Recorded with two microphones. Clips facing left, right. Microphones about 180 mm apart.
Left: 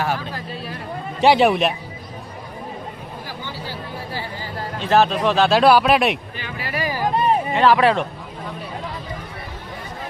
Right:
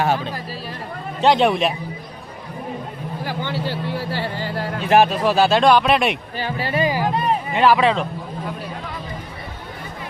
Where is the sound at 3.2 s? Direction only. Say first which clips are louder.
Right 9 dB; 70° right (ahead or behind).